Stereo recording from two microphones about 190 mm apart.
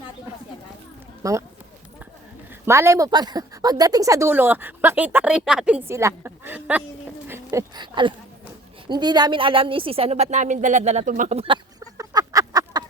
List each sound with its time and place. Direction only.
1.2 s speech: 15° right (ahead or behind)
2.6 s a woman's voice: 15° right (ahead or behind)